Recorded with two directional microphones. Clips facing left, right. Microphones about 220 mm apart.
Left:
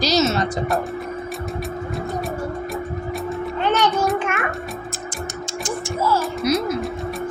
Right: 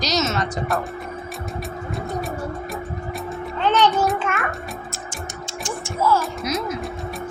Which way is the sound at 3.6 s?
15° left (ahead or behind).